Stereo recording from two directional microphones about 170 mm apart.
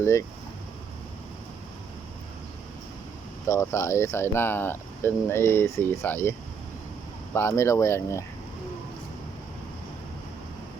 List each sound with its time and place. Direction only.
0.0 s speech: 15° left (ahead or behind)
3.4 s speech: 15° left (ahead or behind)
7.3 s speech: 15° left (ahead or behind)